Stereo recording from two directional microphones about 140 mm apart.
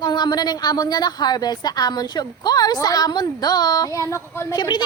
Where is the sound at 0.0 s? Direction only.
30° left (ahead or behind).